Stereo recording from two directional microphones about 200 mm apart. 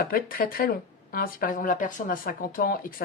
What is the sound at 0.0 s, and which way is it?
Speech, 45° left (ahead or behind).